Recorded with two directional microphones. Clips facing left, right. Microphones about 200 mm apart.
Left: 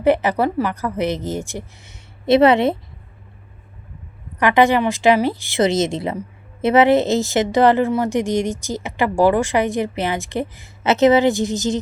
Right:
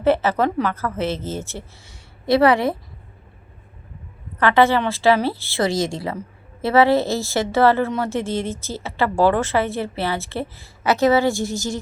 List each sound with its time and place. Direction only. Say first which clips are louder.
0.0 s speech: left 1 dB; 15° left (ahead or behind)
4.4 s speech: left 1 dB; 15° left (ahead or behind)